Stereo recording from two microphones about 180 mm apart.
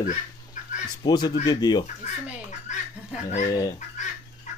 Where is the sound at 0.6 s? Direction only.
45° left (ahead or behind).